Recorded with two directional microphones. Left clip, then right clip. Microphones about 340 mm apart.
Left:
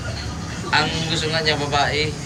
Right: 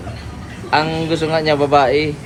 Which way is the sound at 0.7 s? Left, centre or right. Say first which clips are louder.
Right 4 dB; centre.